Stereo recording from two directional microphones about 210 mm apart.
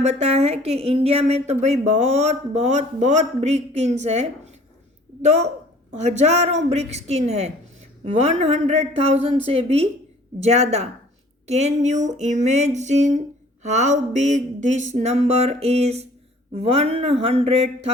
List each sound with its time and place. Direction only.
0.0 s a man's voice: 30° right (ahead or behind)
6.0 s a man's voice: 30° right (ahead or behind)